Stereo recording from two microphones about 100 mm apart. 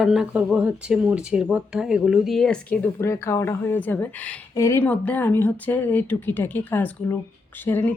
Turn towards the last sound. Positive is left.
turn(degrees=20)  # may be behind; listen again after turning